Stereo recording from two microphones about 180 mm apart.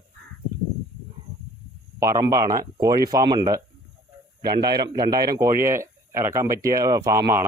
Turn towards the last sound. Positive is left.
turn(degrees=-15)  # may be behind; listen again after turning